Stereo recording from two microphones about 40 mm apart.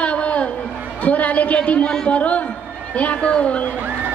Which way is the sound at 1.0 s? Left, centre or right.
Left.